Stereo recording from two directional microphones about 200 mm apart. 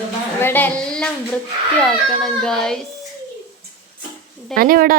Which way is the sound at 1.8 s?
5° left (ahead or behind).